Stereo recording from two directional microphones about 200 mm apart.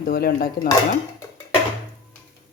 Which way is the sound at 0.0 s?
50° left (ahead or behind).